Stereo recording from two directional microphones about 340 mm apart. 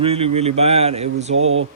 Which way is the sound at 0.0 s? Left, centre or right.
Centre.